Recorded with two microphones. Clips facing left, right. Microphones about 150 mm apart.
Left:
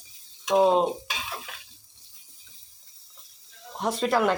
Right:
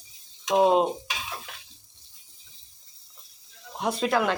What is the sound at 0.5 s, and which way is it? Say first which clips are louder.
Stir: even; 10° right (ahead or behind).